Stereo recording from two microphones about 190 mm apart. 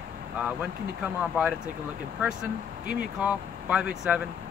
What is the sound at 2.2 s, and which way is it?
Speech, 5° right (ahead or behind).